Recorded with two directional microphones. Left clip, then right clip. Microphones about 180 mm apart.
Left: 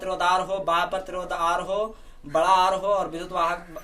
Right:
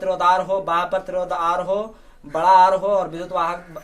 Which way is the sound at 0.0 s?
30° right (ahead or behind).